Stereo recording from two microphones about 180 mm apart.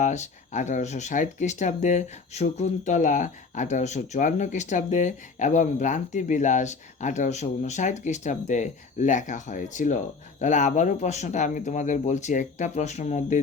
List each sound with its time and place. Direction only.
0.0 s speech: 40° left (ahead or behind)